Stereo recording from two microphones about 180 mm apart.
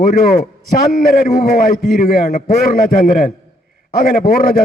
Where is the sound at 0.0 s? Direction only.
55° left (ahead or behind).